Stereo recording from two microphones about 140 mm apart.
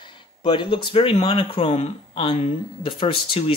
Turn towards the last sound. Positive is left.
turn(degrees=40)  # may be behind; listen again after turning